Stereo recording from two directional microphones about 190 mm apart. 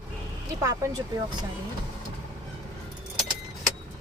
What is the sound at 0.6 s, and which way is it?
Speech, 20° right (ahead or behind).